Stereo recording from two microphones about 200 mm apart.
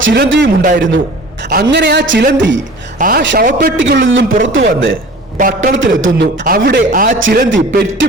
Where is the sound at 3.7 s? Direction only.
70° right (ahead or behind).